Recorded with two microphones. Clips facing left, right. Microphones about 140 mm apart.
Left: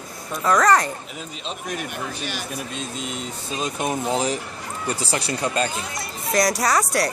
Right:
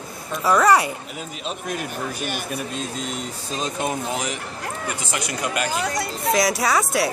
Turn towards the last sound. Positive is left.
turn(degrees=0)  # may be behind; listen again after turning